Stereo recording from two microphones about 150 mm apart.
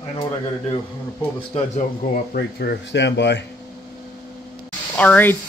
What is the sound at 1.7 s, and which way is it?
Speech, 50° left (ahead or behind).